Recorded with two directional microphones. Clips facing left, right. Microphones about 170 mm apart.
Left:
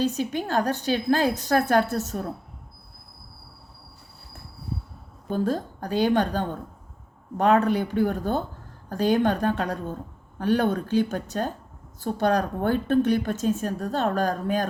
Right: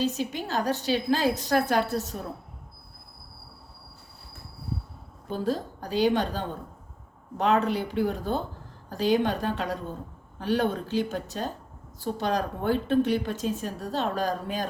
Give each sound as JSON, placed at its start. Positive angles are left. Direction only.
{"t": 0.0, "sound": "a woman's voice", "side_deg": 50}
{"t": 5.3, "sound": "a woman's voice", "side_deg": 50}